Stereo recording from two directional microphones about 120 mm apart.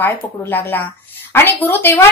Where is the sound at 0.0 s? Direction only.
15° left (ahead or behind).